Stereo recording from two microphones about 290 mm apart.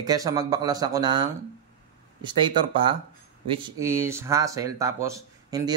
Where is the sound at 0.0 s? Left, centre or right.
Centre.